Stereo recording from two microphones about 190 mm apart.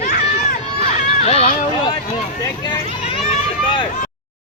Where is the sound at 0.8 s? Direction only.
30° left (ahead or behind).